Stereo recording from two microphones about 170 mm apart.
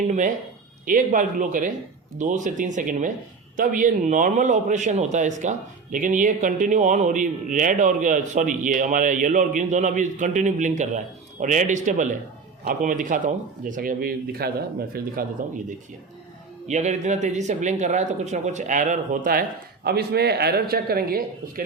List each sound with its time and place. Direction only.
0.9 s a man's voice: 50° right (ahead or behind)
15.4 s a man's voice: 50° right (ahead or behind)
16.6 s a man's voice: 45° right (ahead or behind); by 21.6 s 60° right (ahead or behind)